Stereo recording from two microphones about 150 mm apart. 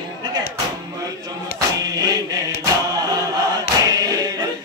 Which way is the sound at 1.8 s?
25° right (ahead or behind).